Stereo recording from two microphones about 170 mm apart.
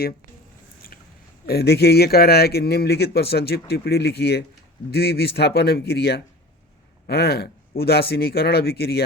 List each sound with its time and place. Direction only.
1.5 s a man's voice: 70° left (ahead or behind)